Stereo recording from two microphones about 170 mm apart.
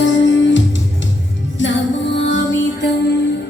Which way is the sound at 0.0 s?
90° left.